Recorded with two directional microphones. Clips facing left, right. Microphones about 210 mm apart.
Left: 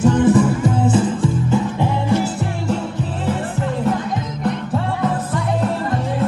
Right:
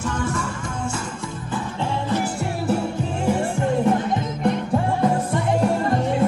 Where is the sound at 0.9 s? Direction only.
30° left (ahead or behind).